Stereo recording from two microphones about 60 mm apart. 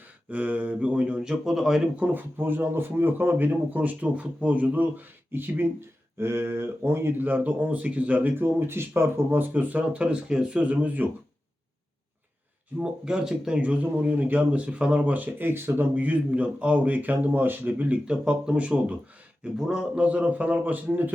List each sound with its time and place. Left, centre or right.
0.3 s speech: right; by 1.8 s centre
2.0 s speech: right
9.5 s speech: right
12.8 s speech: centre
13.6 s speech: right
19.5 s speech: centre
20.0 s speech: right